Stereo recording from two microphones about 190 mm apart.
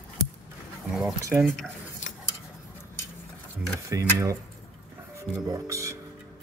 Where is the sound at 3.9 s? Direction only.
15° right (ahead or behind).